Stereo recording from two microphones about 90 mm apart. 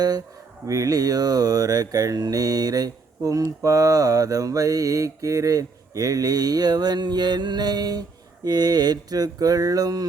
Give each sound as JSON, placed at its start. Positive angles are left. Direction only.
{"t": 0.7, "sound": "mantra", "side_deg": -40}